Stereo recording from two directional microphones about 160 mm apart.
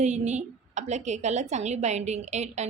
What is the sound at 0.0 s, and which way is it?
A woman's voice, 45° right (ahead or behind).